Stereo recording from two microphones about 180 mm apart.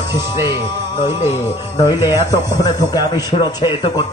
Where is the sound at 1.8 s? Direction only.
20° left (ahead or behind).